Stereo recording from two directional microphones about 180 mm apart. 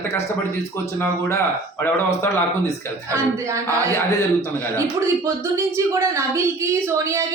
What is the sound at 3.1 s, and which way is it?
Speech, 15° right (ahead or behind).